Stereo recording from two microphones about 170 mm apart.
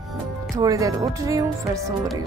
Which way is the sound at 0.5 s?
20° right (ahead or behind).